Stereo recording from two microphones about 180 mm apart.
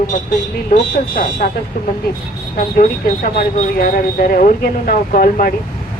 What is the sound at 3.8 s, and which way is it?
Speech, 55° left (ahead or behind).